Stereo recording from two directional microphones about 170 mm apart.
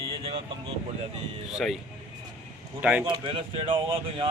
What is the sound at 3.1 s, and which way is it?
Speech, 30° right (ahead or behind).